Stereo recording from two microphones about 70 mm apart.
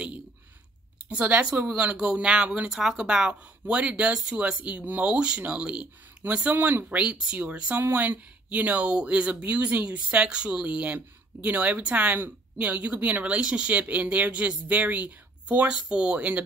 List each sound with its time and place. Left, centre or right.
1.0 s a woman's voice: right
2.7 s a woman's voice: centre